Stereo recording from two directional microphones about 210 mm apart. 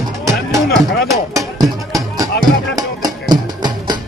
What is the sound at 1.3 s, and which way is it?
Music, 15° right (ahead or behind).